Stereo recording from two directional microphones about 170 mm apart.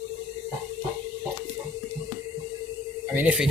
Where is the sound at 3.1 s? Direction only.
10° right (ahead or behind).